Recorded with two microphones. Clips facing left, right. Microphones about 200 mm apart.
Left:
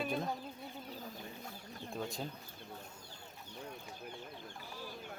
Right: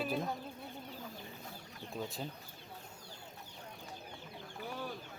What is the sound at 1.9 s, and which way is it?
Speech, 5° right (ahead or behind).